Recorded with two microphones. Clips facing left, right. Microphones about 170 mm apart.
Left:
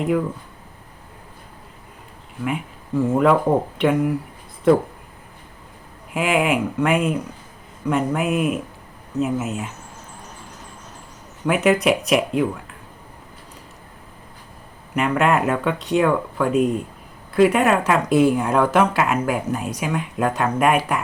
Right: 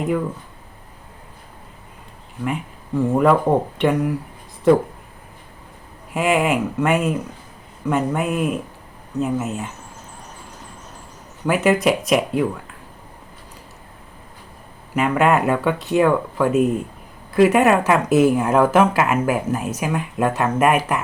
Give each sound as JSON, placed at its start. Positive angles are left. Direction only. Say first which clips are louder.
{"t": 2.4, "sound": "speech", "louder": "even", "side_deg": 5}
{"t": 6.1, "sound": "speech", "louder": "right 1 dB", "side_deg": 0}
{"t": 11.4, "sound": "speech", "louder": "even", "side_deg": 0}
{"t": 14.9, "sound": "speech", "louder": "right 2 dB", "side_deg": -5}